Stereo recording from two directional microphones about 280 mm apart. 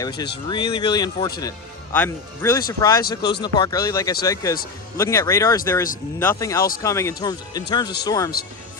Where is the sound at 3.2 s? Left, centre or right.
Left.